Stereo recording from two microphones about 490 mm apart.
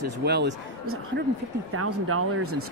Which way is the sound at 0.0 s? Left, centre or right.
Centre.